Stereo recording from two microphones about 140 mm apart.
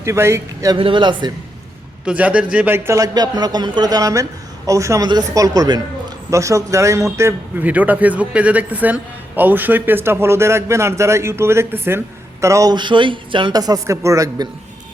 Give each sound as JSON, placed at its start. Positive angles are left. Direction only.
{"t": 0.0, "sound": "a man's voice", "side_deg": -20}
{"t": 0.8, "sound": "a man's voice", "side_deg": -35}
{"t": 2.0, "sound": "a man's voice", "side_deg": -10}